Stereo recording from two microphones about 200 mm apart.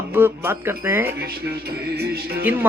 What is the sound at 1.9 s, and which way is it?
Music, 50° right (ahead or behind).